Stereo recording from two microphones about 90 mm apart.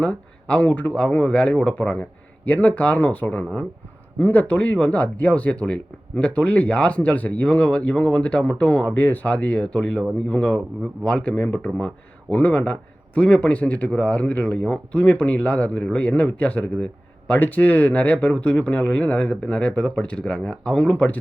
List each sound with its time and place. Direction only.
0.0 s a man's voice: 15° left (ahead or behind)